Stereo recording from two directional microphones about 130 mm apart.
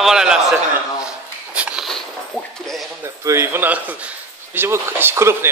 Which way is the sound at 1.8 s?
5° left (ahead or behind).